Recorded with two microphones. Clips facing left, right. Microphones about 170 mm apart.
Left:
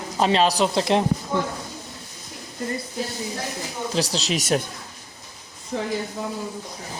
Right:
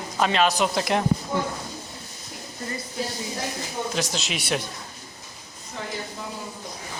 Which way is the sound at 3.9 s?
35° left (ahead or behind).